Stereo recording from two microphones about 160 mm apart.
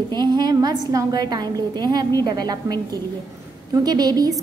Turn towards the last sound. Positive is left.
turn(degrees=-25)  # may be behind; listen again after turning